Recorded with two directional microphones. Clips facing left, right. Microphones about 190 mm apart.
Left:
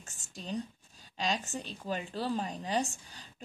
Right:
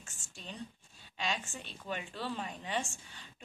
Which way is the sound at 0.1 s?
40° left (ahead or behind).